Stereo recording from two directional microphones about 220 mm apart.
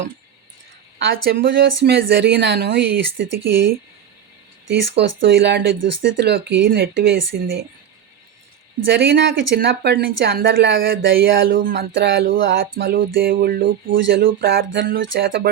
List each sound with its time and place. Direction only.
0.9 s speech: 45° right (ahead or behind)
4.7 s speech: 50° right (ahead or behind)
8.9 s speech: 50° right (ahead or behind)
11.4 s speech: 40° right (ahead or behind)
11.7 s speech: 50° right (ahead or behind)
14.3 s a sound: 55° right (ahead or behind)